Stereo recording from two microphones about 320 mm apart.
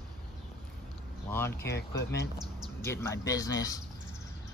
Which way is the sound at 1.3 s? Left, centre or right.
Centre.